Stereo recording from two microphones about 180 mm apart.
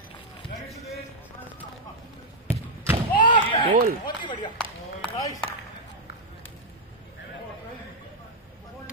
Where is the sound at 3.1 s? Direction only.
25° left (ahead or behind).